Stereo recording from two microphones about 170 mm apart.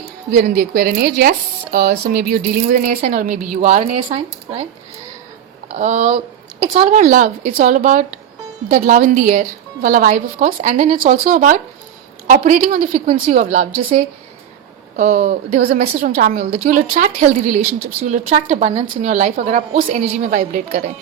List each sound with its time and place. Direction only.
0.3 s speech: 65° right (ahead or behind)
2.8 s a woman's voice: 50° right (ahead or behind)
5.6 s a woman's voice: 50° right (ahead or behind)